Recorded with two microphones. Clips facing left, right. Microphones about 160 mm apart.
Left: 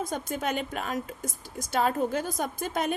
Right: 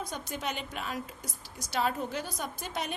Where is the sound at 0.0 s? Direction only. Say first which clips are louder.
Left 6 dB; 50° left (ahead or behind).